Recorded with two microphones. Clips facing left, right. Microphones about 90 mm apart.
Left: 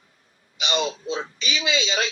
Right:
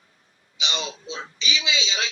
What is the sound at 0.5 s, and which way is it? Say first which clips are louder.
A man's voice: left 6 dB; 50° left (ahead or behind).